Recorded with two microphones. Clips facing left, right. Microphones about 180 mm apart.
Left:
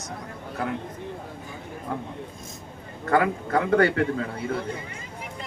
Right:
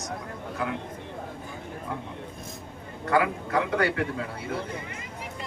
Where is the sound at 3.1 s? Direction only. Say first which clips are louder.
Left 2 dB; 45° left (ahead or behind).